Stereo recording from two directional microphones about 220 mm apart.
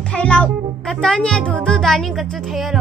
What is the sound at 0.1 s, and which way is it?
A child's voice, 5° left (ahead or behind).